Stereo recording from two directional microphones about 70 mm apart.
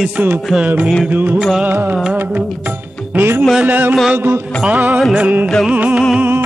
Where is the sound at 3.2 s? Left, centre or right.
Right.